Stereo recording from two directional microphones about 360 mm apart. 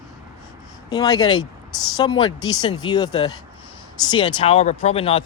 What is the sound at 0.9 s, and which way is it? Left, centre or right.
Speech, centre.